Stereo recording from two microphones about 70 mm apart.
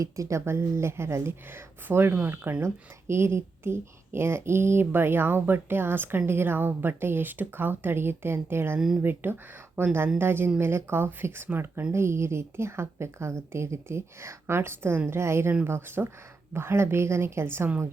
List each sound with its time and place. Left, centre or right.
0.0 s a woman's voice: right